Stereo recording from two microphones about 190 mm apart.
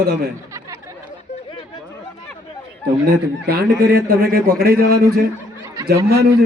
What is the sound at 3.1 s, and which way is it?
A man's voice, 55° right (ahead or behind).